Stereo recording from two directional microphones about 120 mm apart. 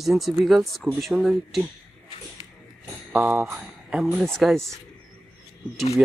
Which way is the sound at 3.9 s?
Centre (ahead or behind).